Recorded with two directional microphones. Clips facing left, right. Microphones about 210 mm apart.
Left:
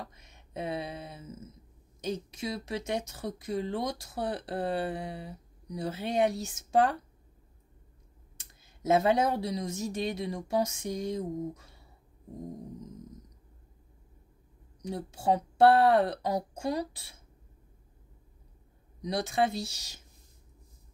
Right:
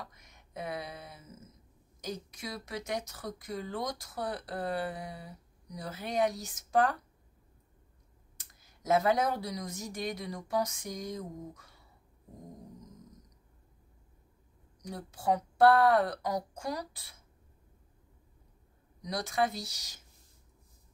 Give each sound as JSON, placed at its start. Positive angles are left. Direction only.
{"t": 0.0, "sound": "speech", "side_deg": 25}
{"t": 8.4, "sound": "speech", "side_deg": 25}
{"t": 14.8, "sound": "speech", "side_deg": 25}
{"t": 18.9, "sound": "speech", "side_deg": 25}